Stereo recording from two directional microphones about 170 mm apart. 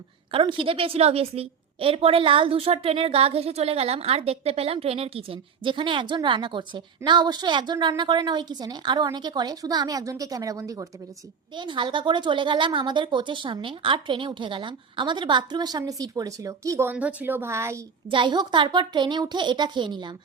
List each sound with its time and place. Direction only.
0.3 s a woman's voice: 30° right (ahead or behind); by 17.8 s 15° right (ahead or behind)
18.1 s a woman's voice: 30° right (ahead or behind)